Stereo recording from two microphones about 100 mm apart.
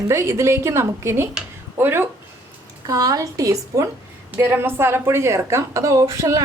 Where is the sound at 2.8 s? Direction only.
35° right (ahead or behind).